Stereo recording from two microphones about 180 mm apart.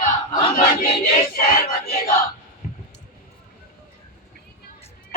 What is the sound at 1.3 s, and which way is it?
Speech, 55° left (ahead or behind).